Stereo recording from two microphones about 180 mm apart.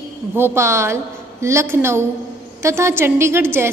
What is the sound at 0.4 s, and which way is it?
A woman's voice, 15° right (ahead or behind).